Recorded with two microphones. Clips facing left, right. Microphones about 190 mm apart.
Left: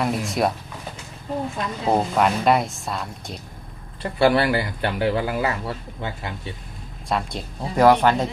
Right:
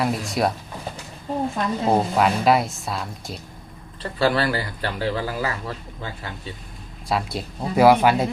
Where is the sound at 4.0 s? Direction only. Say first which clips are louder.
Left 3 dB; 15° left (ahead or behind).